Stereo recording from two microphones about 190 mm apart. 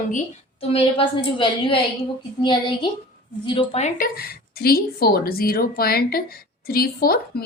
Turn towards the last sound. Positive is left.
turn(degrees=50)  # may be behind; listen again after turning